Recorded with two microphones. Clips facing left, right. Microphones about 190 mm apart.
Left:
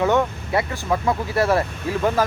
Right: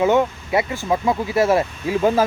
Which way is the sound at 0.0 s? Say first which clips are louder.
Right 2 dB; 15° right (ahead or behind).